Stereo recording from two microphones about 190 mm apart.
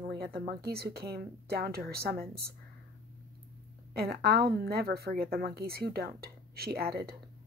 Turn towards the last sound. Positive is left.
turn(degrees=-55)  # may be behind; listen again after turning